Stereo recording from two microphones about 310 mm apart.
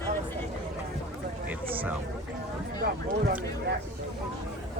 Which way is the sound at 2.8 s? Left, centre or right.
Right.